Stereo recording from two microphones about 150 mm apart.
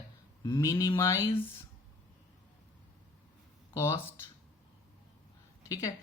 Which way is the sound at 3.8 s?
20° left (ahead or behind).